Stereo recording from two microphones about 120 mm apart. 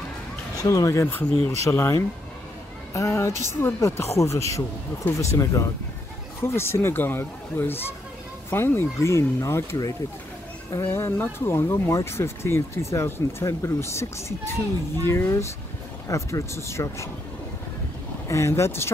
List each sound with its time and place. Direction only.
0.6 s speech: 25° left (ahead or behind)
1.3 s speech: 55° right (ahead or behind)
1.6 s speech: 20° left (ahead or behind)
18.3 s speech: 25° left (ahead or behind)